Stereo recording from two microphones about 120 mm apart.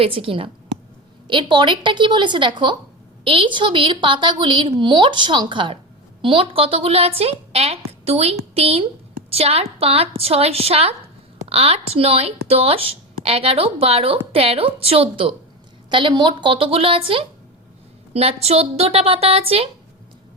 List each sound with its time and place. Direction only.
0.0 s a woman's voice: 50° right (ahead or behind)